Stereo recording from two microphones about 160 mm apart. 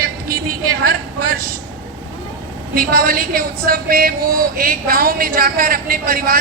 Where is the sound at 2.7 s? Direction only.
65° right (ahead or behind).